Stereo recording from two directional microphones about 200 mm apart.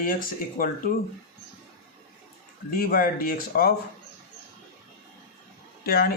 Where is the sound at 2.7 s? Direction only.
45° left (ahead or behind).